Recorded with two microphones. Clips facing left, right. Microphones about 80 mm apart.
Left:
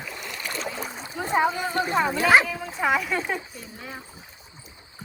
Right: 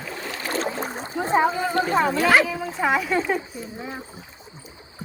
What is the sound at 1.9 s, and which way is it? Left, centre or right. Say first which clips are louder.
Speech: even; centre.